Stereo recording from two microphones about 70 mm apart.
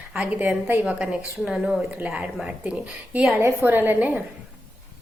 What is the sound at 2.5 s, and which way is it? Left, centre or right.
Speech, centre.